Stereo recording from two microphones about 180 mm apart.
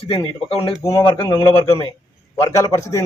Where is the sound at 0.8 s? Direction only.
15° left (ahead or behind).